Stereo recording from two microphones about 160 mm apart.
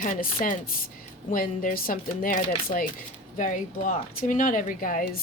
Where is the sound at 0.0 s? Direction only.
60° left (ahead or behind).